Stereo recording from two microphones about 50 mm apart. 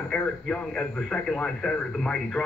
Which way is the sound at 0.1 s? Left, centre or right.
Centre.